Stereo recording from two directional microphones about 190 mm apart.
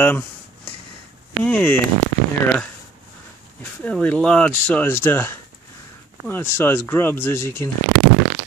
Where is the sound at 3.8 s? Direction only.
10° left (ahead or behind).